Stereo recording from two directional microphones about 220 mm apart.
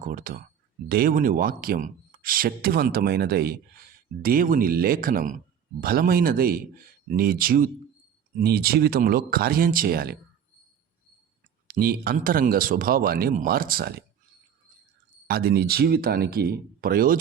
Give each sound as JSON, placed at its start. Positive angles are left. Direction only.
{"t": 0.0, "sound": "speech", "side_deg": -40}
{"t": 11.7, "sound": "speech", "side_deg": -45}
{"t": 15.3, "sound": "speech", "side_deg": -45}